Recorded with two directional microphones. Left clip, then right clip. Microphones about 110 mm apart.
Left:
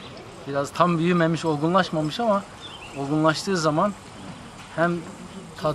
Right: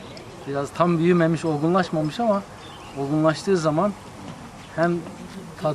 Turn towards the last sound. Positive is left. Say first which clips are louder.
# even
turn(degrees=15)  # may be behind; listen again after turning